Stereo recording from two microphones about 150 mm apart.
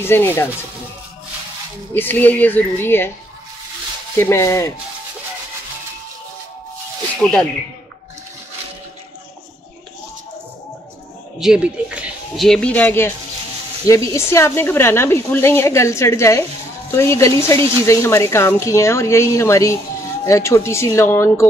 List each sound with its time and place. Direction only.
0.0 s speech: 15° left (ahead or behind)
2.0 s speech: 10° left (ahead or behind)
4.2 s speech: 20° left (ahead or behind)
7.2 s speech: 10° left (ahead or behind)
11.3 s a sound: 5° right (ahead or behind)
12.4 s speech: 10° left (ahead or behind)